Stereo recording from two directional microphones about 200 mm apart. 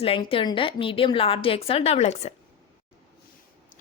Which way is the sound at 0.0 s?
25° left (ahead or behind).